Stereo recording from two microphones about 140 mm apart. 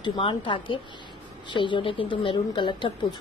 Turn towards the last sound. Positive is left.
turn(degrees=35)  # may be behind; listen again after turning